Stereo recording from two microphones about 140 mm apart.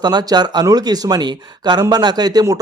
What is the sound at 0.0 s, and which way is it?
Speech, 30° right (ahead or behind).